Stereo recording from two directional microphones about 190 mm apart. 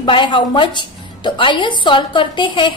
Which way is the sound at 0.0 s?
25° left (ahead or behind).